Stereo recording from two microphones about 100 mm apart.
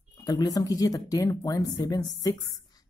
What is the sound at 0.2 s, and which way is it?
Speech, 40° left (ahead or behind).